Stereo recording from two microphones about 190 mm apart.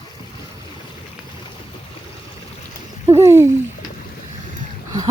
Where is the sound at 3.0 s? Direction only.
15° right (ahead or behind).